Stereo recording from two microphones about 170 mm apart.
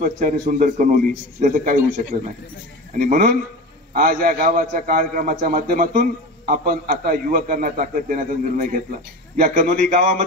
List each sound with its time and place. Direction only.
0.0 s a man's voice: 50° right (ahead or behind)